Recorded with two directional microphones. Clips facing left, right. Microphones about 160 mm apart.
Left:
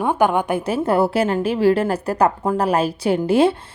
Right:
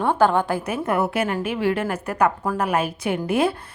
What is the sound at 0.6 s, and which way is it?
A woman's voice, 30° left (ahead or behind).